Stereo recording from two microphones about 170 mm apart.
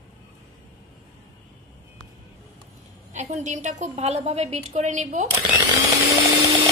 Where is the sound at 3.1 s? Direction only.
45° right (ahead or behind).